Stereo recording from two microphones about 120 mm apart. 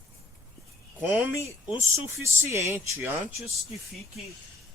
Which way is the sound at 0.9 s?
15° right (ahead or behind).